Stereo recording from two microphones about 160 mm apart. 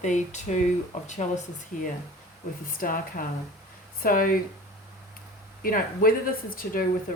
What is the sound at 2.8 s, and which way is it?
Speech, 60° left (ahead or behind).